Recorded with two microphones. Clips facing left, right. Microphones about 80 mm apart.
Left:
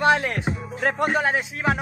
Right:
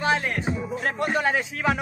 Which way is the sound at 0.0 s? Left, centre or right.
Left.